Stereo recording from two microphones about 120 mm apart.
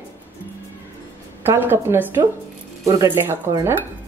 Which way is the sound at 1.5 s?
20° right (ahead or behind).